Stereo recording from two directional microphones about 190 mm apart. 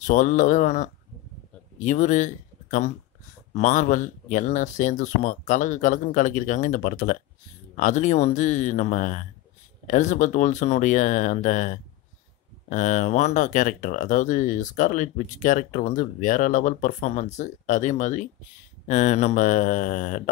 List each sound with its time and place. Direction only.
0.0 s speech: 40° left (ahead or behind)